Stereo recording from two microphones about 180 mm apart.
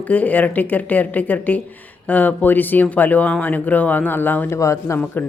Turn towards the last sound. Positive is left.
turn(degrees=10)  # may be behind; listen again after turning